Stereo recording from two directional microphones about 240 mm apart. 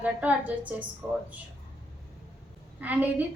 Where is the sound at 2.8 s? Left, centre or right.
Centre.